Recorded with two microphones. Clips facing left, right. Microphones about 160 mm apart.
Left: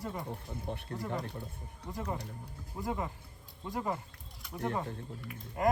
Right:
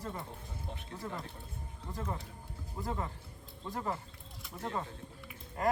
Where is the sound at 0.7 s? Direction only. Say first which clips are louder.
Left 8 dB; 60° left (ahead or behind).